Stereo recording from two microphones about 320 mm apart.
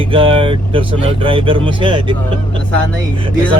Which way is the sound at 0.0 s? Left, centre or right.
Centre.